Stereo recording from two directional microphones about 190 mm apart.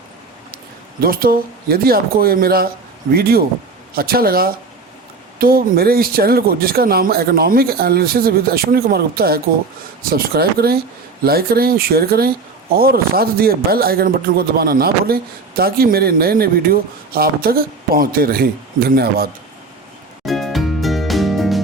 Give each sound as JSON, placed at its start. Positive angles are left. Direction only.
{"t": 1.0, "sound": "speech", "side_deg": -50}
{"t": 20.2, "sound": "music", "side_deg": 0}